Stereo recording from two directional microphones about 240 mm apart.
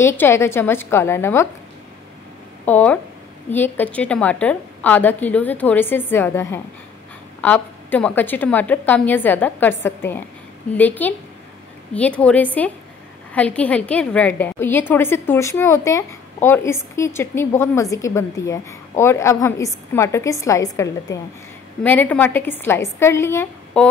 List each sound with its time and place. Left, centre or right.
0.0 s a woman's voice: centre
2.6 s a woman's voice: centre